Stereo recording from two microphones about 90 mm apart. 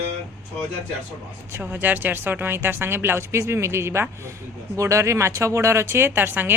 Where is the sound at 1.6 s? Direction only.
20° right (ahead or behind).